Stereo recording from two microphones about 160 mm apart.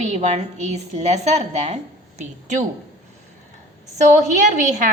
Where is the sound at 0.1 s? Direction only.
45° right (ahead or behind).